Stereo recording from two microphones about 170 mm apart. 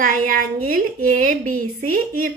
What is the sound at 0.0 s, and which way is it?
A woman's voice, 50° right (ahead or behind).